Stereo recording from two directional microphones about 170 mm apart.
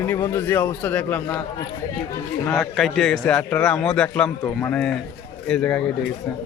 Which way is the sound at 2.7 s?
Centre (ahead or behind).